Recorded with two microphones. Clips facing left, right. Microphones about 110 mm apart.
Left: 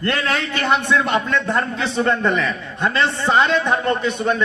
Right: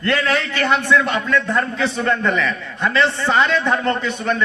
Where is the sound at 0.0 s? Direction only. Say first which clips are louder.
Right 2 dB; 20° left (ahead or behind).